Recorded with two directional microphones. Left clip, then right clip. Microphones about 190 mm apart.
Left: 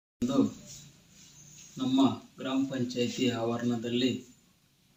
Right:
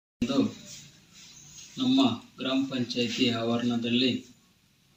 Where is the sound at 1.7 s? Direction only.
5° left (ahead or behind).